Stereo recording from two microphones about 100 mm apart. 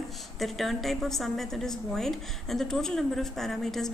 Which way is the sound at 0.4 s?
Centre (ahead or behind).